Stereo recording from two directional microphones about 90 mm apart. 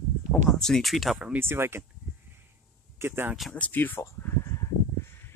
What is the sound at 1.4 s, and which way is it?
Speech, 25° right (ahead or behind).